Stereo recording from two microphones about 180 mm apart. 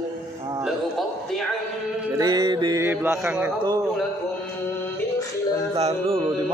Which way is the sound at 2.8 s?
10° right (ahead or behind).